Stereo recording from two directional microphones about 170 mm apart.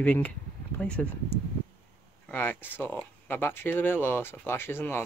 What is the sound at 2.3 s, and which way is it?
Speech, 10° left (ahead or behind).